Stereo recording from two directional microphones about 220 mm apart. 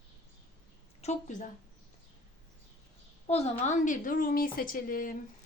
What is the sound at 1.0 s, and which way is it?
Speech, 35° left (ahead or behind).